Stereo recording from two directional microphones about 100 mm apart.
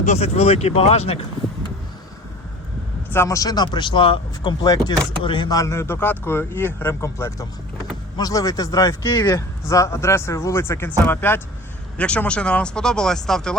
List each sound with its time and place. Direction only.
0.2 s speech: 90° left
3.2 s speech: 35° left (ahead or behind); by 4.5 s 55° left (ahead or behind)
4.6 s a man's voice: 40° left (ahead or behind)
5.2 s speech: 55° left (ahead or behind)
5.5 s a man's voice: 35° left (ahead or behind); by 13.6 s 5° left (ahead or behind)